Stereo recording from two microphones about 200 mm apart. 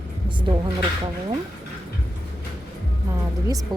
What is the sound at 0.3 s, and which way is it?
Speech, 25° right (ahead or behind).